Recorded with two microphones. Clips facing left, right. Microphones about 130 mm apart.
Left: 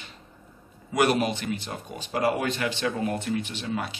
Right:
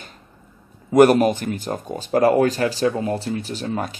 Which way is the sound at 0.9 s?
45° right (ahead or behind).